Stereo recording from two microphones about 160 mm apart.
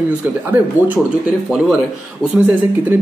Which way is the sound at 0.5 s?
10° right (ahead or behind).